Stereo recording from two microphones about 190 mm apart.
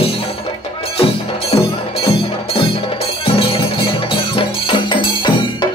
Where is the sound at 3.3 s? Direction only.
30° left (ahead or behind).